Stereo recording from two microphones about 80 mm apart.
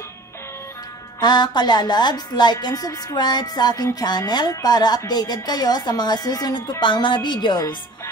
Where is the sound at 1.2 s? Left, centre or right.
Left.